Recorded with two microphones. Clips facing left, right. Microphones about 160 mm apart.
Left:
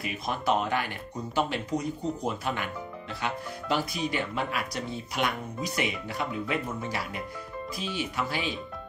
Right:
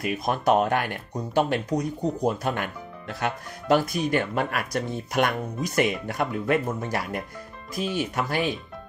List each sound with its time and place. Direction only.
0.0 s speech: 50° right (ahead or behind)